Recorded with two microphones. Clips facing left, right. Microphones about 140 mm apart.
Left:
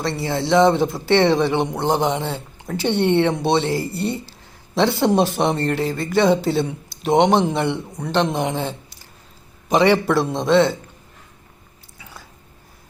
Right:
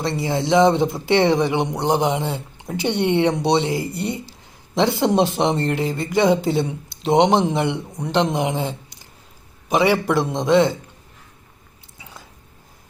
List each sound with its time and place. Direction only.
0.0 s speech: 20° right (ahead or behind)
9.6 s speech: 5° right (ahead or behind)
11.9 s biting: 20° right (ahead or behind)